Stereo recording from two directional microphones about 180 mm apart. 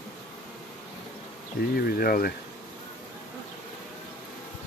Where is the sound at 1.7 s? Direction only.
55° left (ahead or behind).